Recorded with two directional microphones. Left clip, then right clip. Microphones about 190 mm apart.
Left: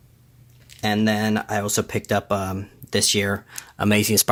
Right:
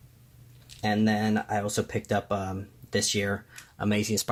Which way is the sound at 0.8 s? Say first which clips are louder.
Left 5 dB; 25° left (ahead or behind).